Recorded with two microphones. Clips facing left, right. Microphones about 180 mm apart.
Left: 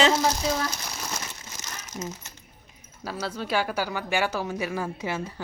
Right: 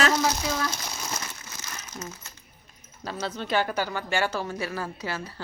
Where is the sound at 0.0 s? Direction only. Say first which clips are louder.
Left 2 dB; 25° left (ahead or behind).